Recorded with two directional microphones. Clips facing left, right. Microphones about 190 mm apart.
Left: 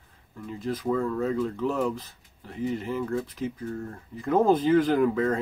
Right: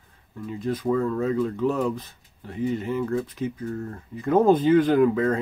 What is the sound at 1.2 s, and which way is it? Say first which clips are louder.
Speech: right 3 dB; 15° right (ahead or behind).